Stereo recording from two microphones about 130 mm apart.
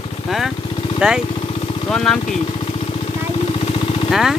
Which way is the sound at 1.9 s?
5° left (ahead or behind).